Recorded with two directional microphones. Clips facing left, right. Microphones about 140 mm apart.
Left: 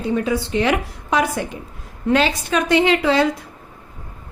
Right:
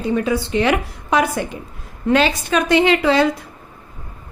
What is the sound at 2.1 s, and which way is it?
A woman's voice, 75° right (ahead or behind).